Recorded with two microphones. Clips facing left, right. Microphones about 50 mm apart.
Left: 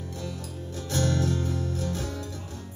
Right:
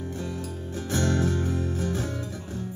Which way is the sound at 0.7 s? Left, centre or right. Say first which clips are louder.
Right 2 dB; right.